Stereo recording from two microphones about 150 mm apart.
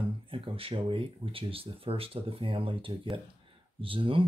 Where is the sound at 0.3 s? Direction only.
35° right (ahead or behind).